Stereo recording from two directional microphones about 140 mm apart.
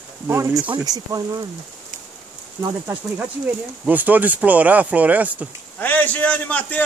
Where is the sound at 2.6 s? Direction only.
25° right (ahead or behind).